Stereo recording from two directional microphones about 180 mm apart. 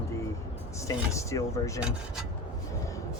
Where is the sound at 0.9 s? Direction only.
15° left (ahead or behind).